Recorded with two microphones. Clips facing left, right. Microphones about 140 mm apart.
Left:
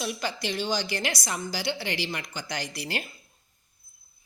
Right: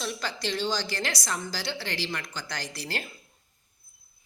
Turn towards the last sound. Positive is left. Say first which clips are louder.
# left 2 dB
turn(degrees=15)  # may be behind; listen again after turning